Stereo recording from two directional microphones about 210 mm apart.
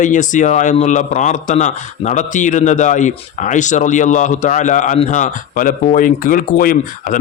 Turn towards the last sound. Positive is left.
turn(degrees=40)  # may be behind; listen again after turning